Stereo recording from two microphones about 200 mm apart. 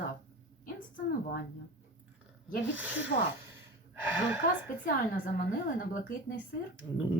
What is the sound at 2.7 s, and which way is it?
Speech, 5° right (ahead or behind).